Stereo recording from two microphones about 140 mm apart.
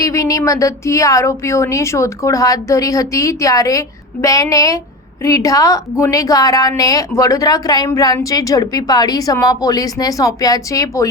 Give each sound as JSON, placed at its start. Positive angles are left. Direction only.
{"t": 0.0, "sound": "a woman's voice", "side_deg": 25}